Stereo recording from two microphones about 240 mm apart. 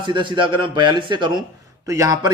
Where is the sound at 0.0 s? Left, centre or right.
Centre.